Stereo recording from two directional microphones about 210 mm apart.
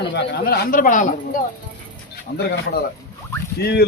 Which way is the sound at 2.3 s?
50° left (ahead or behind).